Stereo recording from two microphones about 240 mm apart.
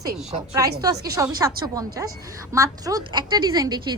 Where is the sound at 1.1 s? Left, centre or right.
Centre.